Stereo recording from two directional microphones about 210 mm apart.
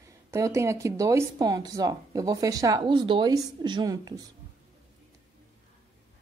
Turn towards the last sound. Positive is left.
turn(degrees=-15)  # may be behind; listen again after turning